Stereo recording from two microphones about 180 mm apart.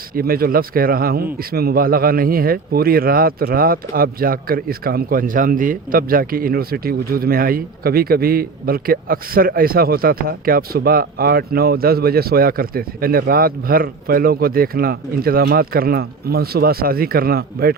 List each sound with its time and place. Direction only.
0.1 s a man's voice: 55° right (ahead or behind)